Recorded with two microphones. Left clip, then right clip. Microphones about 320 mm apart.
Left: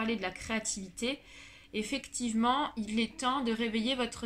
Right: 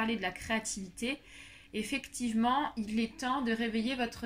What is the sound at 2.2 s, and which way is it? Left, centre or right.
Speech, left.